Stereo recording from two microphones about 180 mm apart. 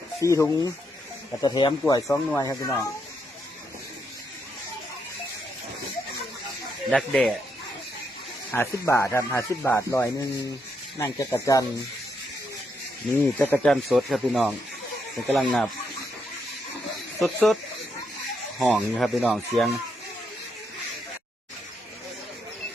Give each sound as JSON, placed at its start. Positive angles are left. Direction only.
{"t": 0.2, "sound": "speech", "side_deg": 15}
{"t": 6.9, "sound": "speech", "side_deg": 0}
{"t": 8.5, "sound": "speech", "side_deg": 15}
{"t": 13.4, "sound": "speech", "side_deg": 5}
{"t": 17.2, "sound": "speech", "side_deg": 0}
{"t": 18.7, "sound": "speech", "side_deg": 0}